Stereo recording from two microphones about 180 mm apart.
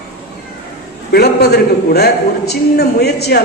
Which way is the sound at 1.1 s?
65° left (ahead or behind).